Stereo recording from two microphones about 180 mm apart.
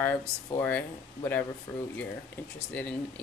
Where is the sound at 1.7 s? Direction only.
15° left (ahead or behind).